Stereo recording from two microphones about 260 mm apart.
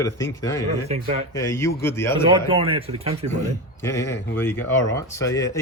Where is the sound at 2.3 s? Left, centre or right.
Right.